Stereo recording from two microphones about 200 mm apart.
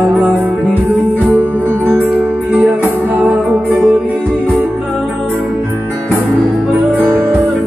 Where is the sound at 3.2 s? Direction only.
5° right (ahead or behind).